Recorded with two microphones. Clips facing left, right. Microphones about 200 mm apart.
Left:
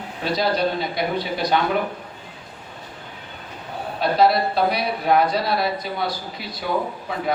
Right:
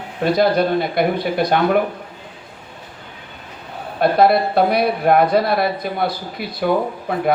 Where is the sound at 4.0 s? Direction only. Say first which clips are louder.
Right 4 dB; 55° right (ahead or behind).